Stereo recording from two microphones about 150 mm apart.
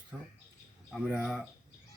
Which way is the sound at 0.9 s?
5° right (ahead or behind).